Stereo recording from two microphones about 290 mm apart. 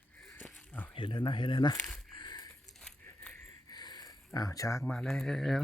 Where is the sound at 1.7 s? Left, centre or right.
Centre.